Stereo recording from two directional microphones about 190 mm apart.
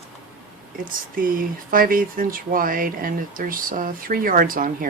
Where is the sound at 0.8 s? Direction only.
45° right (ahead or behind).